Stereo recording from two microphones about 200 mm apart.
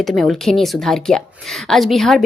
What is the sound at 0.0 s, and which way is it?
A woman's voice, centre (ahead or behind).